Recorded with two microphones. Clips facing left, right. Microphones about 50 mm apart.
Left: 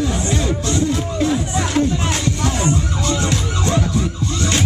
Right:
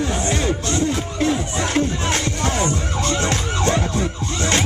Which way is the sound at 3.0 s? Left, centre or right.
Right.